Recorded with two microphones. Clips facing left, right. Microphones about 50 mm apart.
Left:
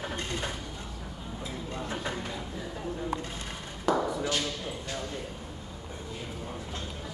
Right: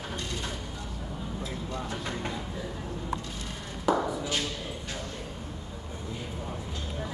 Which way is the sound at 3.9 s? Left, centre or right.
Centre.